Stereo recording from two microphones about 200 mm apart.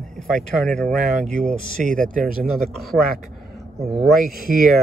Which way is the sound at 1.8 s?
40° right (ahead or behind).